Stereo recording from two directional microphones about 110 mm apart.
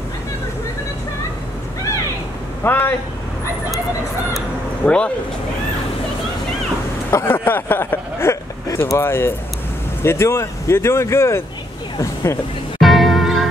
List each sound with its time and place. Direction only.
2.6 s speech: 20° left (ahead or behind)
4.8 s speech: 10° left (ahead or behind)
7.1 s speech: 25° left (ahead or behind)
12.8 s music: centre (ahead or behind)